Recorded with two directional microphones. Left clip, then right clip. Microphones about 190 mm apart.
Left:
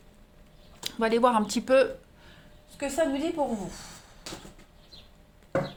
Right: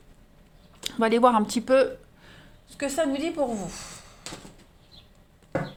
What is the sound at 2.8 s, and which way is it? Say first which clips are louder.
Speech: right 1 dB; 45° right (ahead or behind).